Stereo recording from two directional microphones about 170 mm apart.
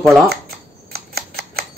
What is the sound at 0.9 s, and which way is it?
Camera, 65° right (ahead or behind).